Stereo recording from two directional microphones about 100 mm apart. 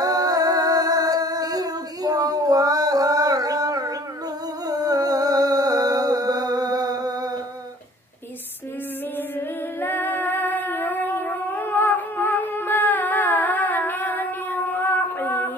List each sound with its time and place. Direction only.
0.0 s music: 40° right (ahead or behind)
4.6 s a sound: 40° right (ahead or behind)
9.8 s music: 20° left (ahead or behind)